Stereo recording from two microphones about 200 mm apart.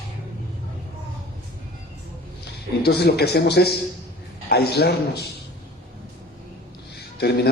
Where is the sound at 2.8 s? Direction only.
55° left (ahead or behind).